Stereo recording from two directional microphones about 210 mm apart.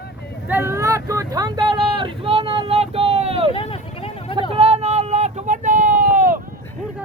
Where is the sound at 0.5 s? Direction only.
10° right (ahead or behind); by 3.5 s 30° right (ahead or behind).